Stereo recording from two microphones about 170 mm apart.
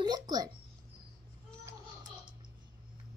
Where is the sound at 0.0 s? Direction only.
25° right (ahead or behind).